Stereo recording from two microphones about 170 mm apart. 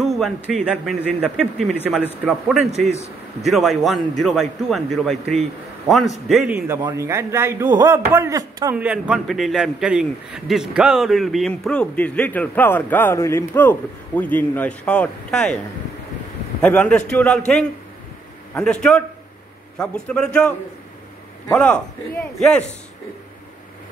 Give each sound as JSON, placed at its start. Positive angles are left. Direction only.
{"t": 0.0, "sound": "a man's voice", "side_deg": 0}
{"t": 6.8, "sound": "a man's voice", "side_deg": -20}
{"t": 8.7, "sound": "a man's voice", "side_deg": -10}
{"t": 16.6, "sound": "speech", "side_deg": 10}
{"t": 18.5, "sound": "a man's voice", "side_deg": 5}